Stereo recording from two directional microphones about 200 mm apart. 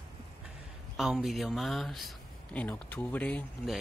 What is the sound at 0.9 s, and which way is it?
Speech, centre (ahead or behind).